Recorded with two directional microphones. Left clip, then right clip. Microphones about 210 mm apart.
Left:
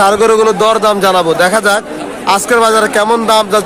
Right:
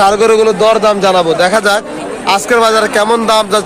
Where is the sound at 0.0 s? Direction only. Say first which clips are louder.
Even; 10° left (ahead or behind).